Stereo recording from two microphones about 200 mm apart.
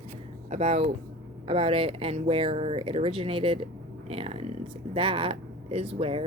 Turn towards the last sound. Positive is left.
turn(degrees=-30)  # may be behind; listen again after turning